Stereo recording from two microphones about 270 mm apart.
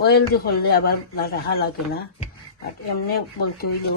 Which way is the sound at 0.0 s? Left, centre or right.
Left.